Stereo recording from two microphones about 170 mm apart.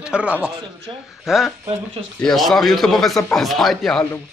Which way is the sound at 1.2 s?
Centre (ahead or behind).